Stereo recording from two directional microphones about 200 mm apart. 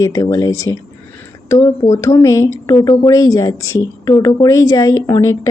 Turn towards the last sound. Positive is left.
turn(degrees=15)  # may be behind; listen again after turning